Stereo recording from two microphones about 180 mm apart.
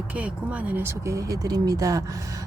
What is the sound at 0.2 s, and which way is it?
Speech, 10° right (ahead or behind).